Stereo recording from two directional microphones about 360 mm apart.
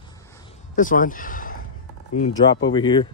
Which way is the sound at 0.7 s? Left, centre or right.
Left.